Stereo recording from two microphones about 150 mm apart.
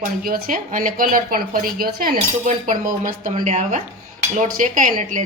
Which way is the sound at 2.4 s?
55° right (ahead or behind).